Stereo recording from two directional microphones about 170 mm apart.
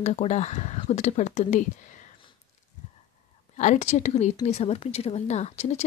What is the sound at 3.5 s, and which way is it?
Speech, 45° left (ahead or behind).